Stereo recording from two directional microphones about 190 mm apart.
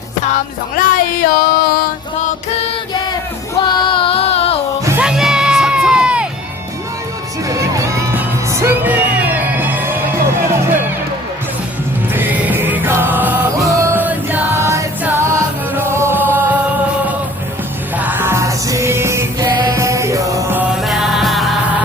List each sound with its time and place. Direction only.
0.8 s music: 50° left (ahead or behind)
3.6 s music: 25° left (ahead or behind)
4.9 s music: 5° right (ahead or behind)
7.4 s music: 15° right (ahead or behind)
12.1 s music: 10° right (ahead or behind)
17.9 s music: 10° right (ahead or behind)
20.8 s music: centre (ahead or behind)